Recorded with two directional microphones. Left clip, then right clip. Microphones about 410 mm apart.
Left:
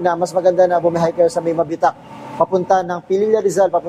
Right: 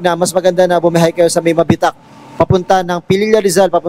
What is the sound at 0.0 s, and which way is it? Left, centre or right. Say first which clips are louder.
A man's voice: right 3 dB; right.